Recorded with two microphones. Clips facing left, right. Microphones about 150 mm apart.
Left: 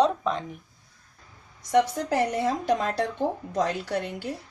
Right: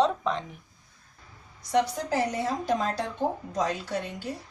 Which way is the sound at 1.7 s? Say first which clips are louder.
Left 3 dB; 60° left (ahead or behind).